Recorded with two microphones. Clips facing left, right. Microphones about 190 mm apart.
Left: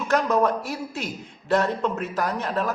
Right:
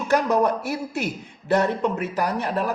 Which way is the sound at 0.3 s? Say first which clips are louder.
Right 1 dB; 10° right (ahead or behind).